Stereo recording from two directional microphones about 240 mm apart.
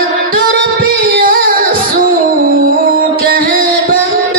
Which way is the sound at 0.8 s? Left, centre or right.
Right.